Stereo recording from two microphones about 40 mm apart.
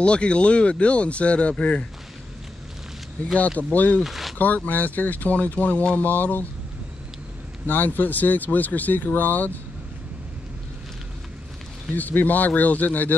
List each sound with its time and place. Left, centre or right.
0.0 s speech: left
3.3 s speech: left
4.0 s a sound: centre
4.4 s speech: left
7.6 s speech: left
11.9 s speech: left